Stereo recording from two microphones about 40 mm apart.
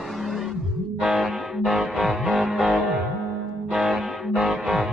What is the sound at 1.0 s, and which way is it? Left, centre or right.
Music, centre.